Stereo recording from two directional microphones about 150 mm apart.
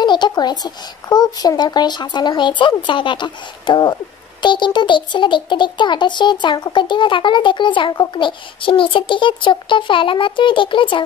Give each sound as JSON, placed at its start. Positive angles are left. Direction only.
{"t": 0.0, "sound": "a child's voice", "side_deg": 30}